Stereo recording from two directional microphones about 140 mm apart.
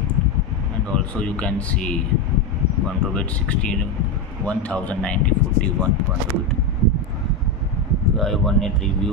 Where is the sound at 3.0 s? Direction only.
5° left (ahead or behind).